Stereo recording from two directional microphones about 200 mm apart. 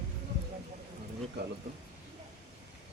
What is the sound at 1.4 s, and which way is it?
Speech, 55° right (ahead or behind).